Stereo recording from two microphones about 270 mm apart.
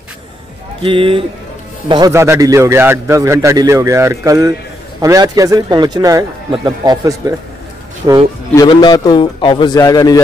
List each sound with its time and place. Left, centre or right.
0.8 s a man's voice: centre
8.5 s a man's voice: centre